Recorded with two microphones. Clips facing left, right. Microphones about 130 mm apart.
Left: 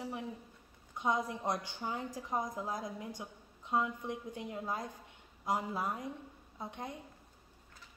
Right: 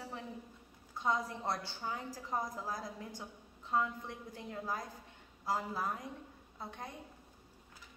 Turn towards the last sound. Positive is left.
turn(degrees=20)  # may be behind; listen again after turning